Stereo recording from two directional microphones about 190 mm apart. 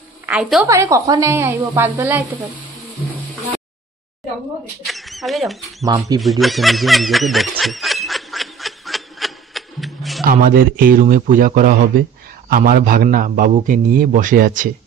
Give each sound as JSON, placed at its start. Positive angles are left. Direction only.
{"t": 0.3, "sound": "a woman's voice", "side_deg": -5}
{"t": 0.7, "sound": "a woman's voice", "side_deg": -15}
{"t": 4.8, "sound": "mouse", "side_deg": 0}
{"t": 5.9, "sound": "speech", "side_deg": -20}
{"t": 6.2, "sound": "snicker", "side_deg": 0}
{"t": 10.2, "sound": "a man's voice", "side_deg": -45}